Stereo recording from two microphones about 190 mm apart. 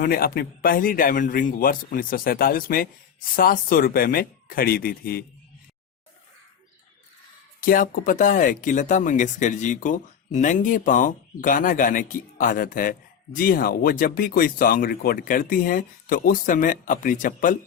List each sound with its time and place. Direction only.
0.0 s speech: 50° left (ahead or behind)
7.6 s speech: 45° left (ahead or behind)